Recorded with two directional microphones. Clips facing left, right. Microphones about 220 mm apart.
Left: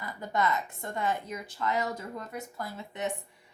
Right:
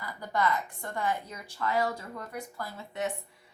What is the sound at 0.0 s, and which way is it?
A woman's voice, 20° left (ahead or behind).